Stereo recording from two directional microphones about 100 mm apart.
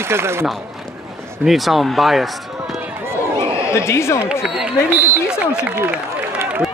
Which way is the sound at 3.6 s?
30° left (ahead or behind).